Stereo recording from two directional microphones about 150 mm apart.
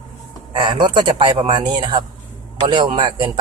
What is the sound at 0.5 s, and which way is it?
Speech, 30° right (ahead or behind).